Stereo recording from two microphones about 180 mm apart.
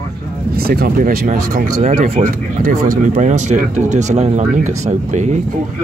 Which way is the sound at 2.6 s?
50° right (ahead or behind).